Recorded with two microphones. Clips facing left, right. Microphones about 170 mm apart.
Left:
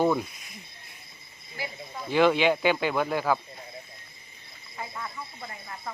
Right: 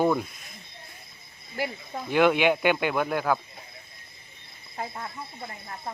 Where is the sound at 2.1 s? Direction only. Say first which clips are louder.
Even; 10° right (ahead or behind).